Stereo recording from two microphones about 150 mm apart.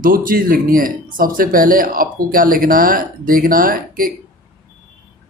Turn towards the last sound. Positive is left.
turn(degrees=-70)  # may be behind; listen again after turning